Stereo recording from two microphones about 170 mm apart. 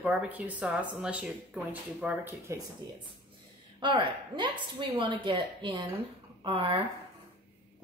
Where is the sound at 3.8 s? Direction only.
30° right (ahead or behind).